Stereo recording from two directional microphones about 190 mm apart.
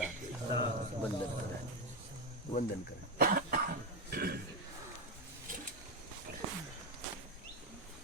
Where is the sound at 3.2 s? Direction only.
50° right (ahead or behind).